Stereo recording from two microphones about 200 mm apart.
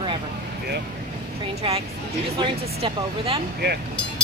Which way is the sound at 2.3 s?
25° right (ahead or behind).